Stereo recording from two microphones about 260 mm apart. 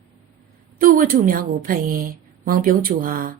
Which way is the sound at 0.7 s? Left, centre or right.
Right.